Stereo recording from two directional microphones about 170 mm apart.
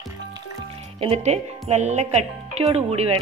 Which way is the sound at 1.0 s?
40° right (ahead or behind).